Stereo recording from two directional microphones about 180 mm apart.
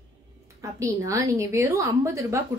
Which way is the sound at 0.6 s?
15° right (ahead or behind).